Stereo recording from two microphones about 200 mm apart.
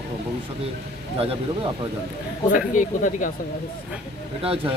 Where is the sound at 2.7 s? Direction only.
40° left (ahead or behind).